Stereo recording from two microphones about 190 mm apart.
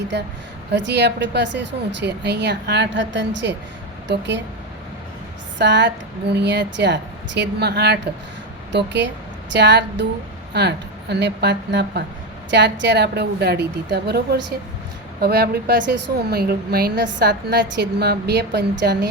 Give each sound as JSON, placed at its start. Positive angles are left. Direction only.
{"t": 0.1, "sound": "a woman's voice", "side_deg": -65}
{"t": 5.5, "sound": "a woman's voice", "side_deg": -65}